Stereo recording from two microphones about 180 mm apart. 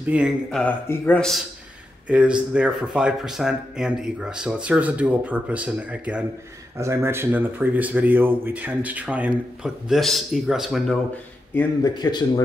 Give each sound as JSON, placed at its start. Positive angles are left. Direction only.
{"t": 0.0, "sound": "speech", "side_deg": -5}
{"t": 0.6, "sound": "speech", "side_deg": 10}
{"t": 2.0, "sound": "speech", "side_deg": -5}
{"t": 11.5, "sound": "speech", "side_deg": 20}